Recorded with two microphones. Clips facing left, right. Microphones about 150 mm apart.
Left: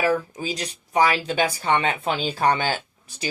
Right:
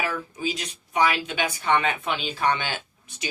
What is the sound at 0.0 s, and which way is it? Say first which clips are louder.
Speech: left 6 dB; 40° left (ahead or behind).